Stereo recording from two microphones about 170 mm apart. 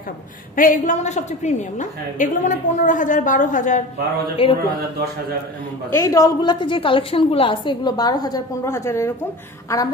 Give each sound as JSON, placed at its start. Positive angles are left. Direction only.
{"t": 0.6, "sound": "a woman's voice", "side_deg": 50}
{"t": 5.9, "sound": "a woman's voice", "side_deg": 15}